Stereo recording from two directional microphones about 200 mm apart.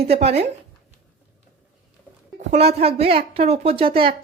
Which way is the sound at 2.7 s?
30° right (ahead or behind).